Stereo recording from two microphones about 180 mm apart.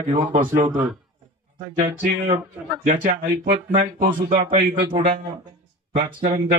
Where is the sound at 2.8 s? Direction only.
50° right (ahead or behind).